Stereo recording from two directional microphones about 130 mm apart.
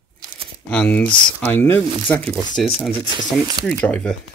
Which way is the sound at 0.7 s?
10° left (ahead or behind).